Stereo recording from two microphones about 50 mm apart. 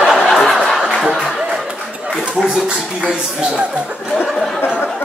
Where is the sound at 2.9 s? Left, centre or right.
Centre.